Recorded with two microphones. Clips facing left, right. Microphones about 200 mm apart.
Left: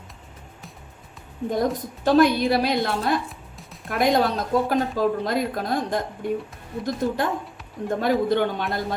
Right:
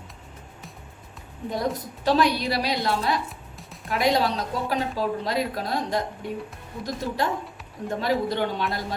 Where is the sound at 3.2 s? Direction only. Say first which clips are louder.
Even; centre (ahead or behind).